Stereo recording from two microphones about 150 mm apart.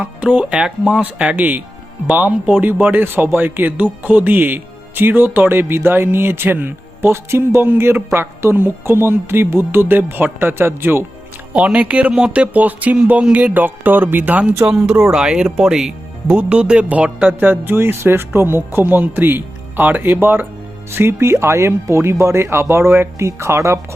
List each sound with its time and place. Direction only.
0.0 s speech: 10° right (ahead or behind)